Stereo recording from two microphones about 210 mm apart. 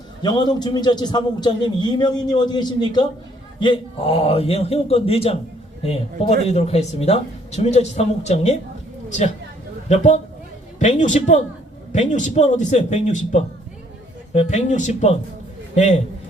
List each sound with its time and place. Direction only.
0.2 s a man's voice: 20° left (ahead or behind)